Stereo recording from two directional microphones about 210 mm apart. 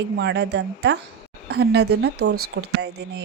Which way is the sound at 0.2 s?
55° right (ahead or behind).